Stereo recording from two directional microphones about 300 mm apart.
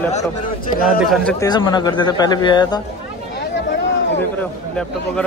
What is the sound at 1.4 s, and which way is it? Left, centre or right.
Speech, centre.